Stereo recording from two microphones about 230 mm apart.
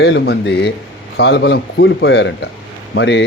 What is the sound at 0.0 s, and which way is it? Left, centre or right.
Speech, left.